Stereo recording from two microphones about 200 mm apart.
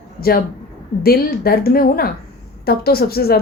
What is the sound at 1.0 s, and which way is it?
A woman's voice, 50° left (ahead or behind).